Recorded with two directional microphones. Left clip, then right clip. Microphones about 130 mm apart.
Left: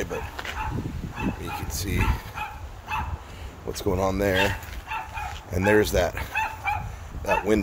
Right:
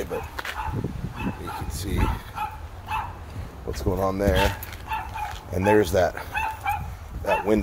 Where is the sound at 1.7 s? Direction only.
20° left (ahead or behind).